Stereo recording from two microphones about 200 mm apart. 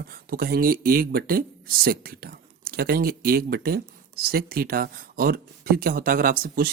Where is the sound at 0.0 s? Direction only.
50° right (ahead or behind).